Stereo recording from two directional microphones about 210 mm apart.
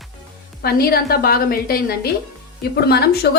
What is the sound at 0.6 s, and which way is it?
A woman's voice, 50° left (ahead or behind).